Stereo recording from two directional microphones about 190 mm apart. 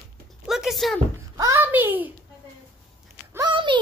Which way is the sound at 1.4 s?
15° right (ahead or behind).